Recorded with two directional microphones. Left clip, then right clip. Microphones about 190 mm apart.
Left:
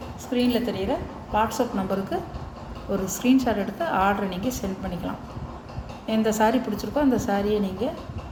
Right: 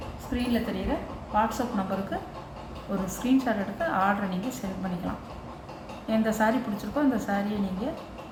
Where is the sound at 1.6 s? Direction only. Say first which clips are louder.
Left 4 dB; 45° left (ahead or behind).